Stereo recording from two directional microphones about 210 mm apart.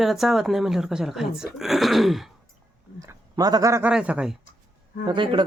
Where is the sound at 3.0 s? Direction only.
15° right (ahead or behind).